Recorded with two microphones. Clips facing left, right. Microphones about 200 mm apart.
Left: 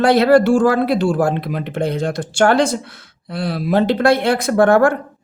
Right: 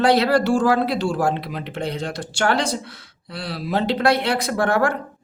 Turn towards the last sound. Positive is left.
turn(degrees=50)  # may be behind; listen again after turning